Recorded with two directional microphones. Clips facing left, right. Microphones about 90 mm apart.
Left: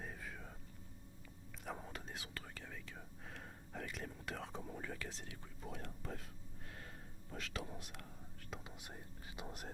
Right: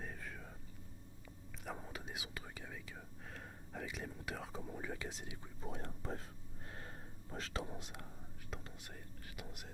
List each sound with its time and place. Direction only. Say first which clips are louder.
0.0 s whispering: right 1 dB; centre (ahead or behind)
1.6 s whispering: right 1 dB; centre (ahead or behind)
4.9 s speech: right 2 dB; 15° right (ahead or behind)
5.6 s speech: right 3 dB; 30° right (ahead or behind)
6.7 s whispering: right 3 dB; 35° right (ahead or behind)
7.6 s speech: right 3 dB; 20° right (ahead or behind)
8.4 s whispering: right 1 dB; centre (ahead or behind)
8.7 s whispering: even; 20° left (ahead or behind)